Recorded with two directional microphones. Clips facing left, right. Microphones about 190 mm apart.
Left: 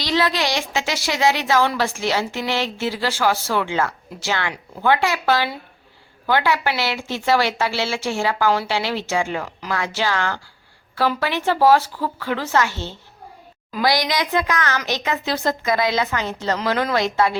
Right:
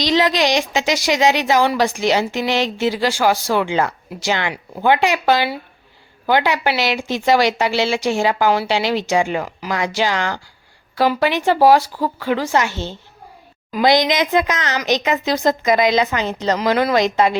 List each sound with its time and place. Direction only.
0.0 s a woman's voice: 20° right (ahead or behind)